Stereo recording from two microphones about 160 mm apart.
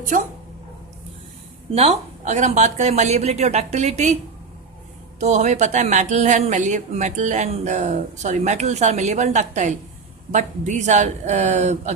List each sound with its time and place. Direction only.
1.7 s a woman's voice: 40° right (ahead or behind)
5.2 s a woman's voice: 45° right (ahead or behind)